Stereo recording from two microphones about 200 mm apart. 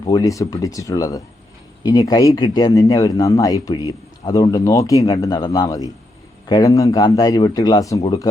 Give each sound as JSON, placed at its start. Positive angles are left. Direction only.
{"t": 0.0, "sound": "a man's voice", "side_deg": 20}